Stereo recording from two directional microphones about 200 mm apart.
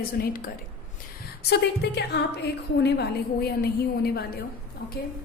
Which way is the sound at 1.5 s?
55° left (ahead or behind).